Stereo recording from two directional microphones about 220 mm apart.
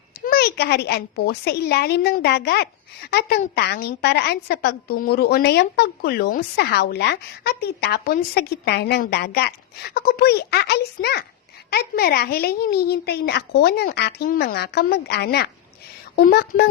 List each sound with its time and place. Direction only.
0.3 s a woman's voice: 45° left (ahead or behind)